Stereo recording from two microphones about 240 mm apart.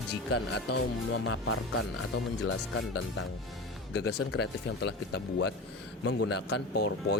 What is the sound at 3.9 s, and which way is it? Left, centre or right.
Speech, left.